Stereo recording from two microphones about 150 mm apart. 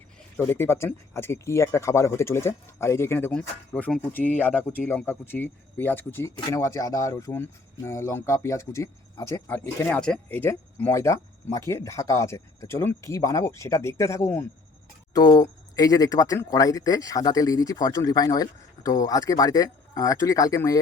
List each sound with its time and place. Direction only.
0.3 s speech: 15° left (ahead or behind)